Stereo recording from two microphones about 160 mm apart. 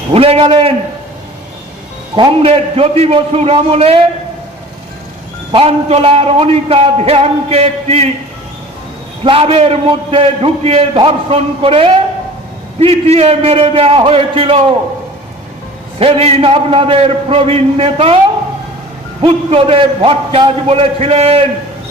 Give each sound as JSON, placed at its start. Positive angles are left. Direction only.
{"t": 0.1, "sound": "a man's voice", "side_deg": -40}
{"t": 2.1, "sound": "a man's voice", "side_deg": -35}
{"t": 5.5, "sound": "a man's voice", "side_deg": -35}
{"t": 9.2, "sound": "a man's voice", "side_deg": -35}
{"t": 16.0, "sound": "a man's voice", "side_deg": -35}
{"t": 19.2, "sound": "a man's voice", "side_deg": -35}